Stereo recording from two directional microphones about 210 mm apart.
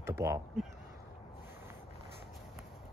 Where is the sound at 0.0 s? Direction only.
15° right (ahead or behind).